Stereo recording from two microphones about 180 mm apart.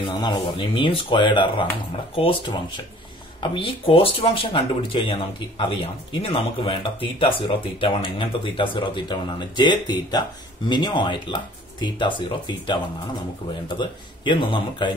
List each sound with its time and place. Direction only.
0.1 s speech: 25° left (ahead or behind)